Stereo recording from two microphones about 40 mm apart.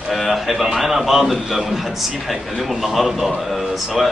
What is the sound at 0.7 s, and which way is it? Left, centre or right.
A man's voice, centre.